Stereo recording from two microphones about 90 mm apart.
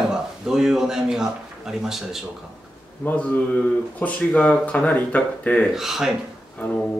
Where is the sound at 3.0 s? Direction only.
20° left (ahead or behind).